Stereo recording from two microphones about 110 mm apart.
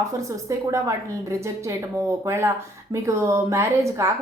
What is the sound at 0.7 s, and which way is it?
A woman's voice, 30° right (ahead or behind).